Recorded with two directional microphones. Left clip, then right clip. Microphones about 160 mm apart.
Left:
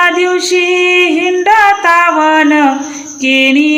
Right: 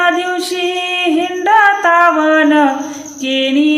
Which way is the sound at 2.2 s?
20° left (ahead or behind).